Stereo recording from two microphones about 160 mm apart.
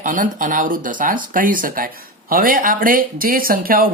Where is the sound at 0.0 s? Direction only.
55° right (ahead or behind).